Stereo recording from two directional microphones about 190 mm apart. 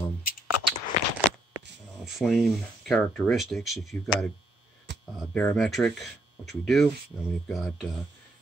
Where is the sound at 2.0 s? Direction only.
Centre (ahead or behind).